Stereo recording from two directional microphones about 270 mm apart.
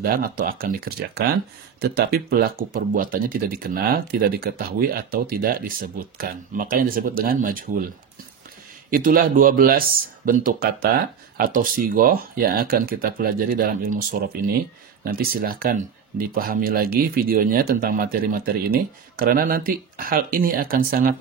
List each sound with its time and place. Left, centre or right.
0.0 s speech: right
8.9 s speech: right